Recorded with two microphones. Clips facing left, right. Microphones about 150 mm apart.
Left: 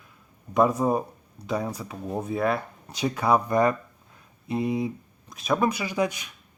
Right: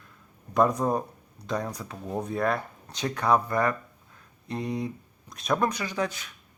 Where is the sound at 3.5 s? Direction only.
20° left (ahead or behind).